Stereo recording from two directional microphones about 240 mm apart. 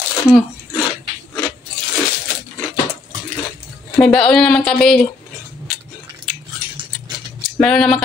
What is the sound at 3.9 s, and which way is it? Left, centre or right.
Speech, centre.